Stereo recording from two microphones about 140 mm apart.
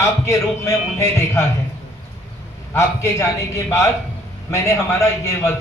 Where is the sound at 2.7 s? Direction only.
20° left (ahead or behind).